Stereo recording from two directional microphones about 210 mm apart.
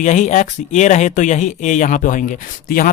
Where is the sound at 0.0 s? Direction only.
35° left (ahead or behind).